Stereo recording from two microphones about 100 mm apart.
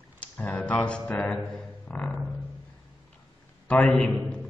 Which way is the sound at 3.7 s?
10° left (ahead or behind).